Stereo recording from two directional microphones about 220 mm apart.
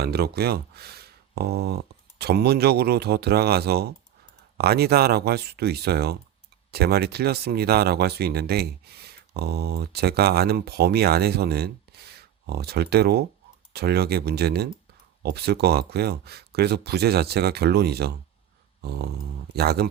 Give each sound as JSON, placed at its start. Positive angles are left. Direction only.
{"t": 0.0, "sound": "speech", "side_deg": -45}
{"t": 18.8, "sound": "dog", "side_deg": -45}
{"t": 19.5, "sound": "speech", "side_deg": -45}